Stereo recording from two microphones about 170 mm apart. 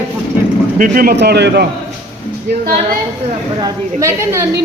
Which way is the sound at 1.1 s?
80° right.